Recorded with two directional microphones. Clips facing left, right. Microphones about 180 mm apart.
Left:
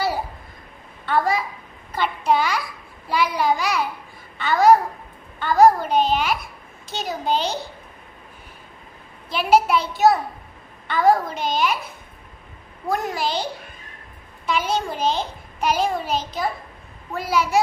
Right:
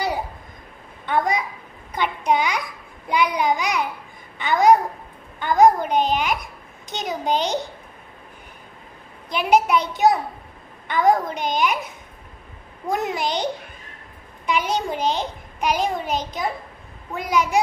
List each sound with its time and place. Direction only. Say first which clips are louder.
1.0 s a woman's voice: left 1 dB; 15° right (ahead or behind)
9.3 s a child's voice: even; 15° right (ahead or behind)